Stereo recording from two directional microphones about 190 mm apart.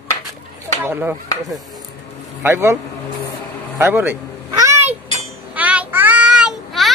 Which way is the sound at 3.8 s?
10° right (ahead or behind).